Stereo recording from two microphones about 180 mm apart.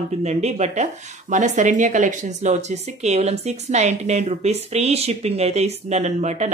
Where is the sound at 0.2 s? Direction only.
35° right (ahead or behind).